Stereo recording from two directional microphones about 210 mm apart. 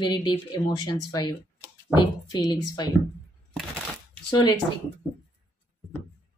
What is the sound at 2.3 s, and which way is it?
Speech, 20° left (ahead or behind).